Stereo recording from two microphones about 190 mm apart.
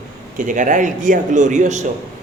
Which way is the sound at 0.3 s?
45° right (ahead or behind).